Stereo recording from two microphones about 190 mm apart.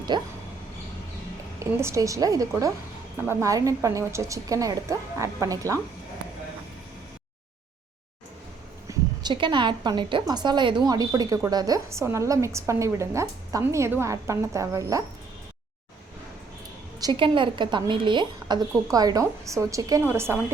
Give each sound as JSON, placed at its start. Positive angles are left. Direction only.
{"t": 0.1, "sound": "a woman's voice", "side_deg": -25}
{"t": 1.5, "sound": "a woman's voice", "side_deg": -15}
{"t": 8.9, "sound": "a woman's voice", "side_deg": -25}
{"t": 17.0, "sound": "a woman's voice", "side_deg": -25}